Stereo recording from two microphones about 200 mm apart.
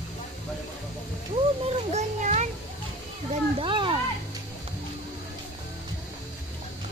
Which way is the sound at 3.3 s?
25° right (ahead or behind).